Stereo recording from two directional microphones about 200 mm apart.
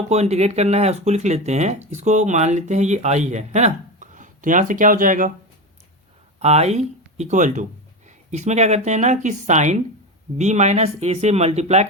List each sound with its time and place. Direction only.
0.1 s speech: 30° right (ahead or behind)
6.4 s speech: 35° right (ahead or behind)